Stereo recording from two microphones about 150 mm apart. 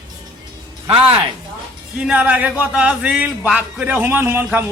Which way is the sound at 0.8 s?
35° right (ahead or behind).